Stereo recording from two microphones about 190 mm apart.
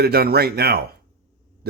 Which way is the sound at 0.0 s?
55° right (ahead or behind).